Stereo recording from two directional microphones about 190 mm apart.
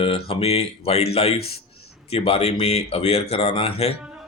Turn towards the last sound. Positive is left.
turn(degrees=30)  # may be behind; listen again after turning